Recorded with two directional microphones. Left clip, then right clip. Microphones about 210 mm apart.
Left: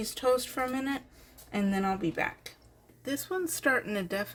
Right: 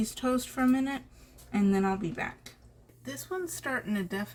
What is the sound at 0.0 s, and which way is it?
Speech, 40° left (ahead or behind).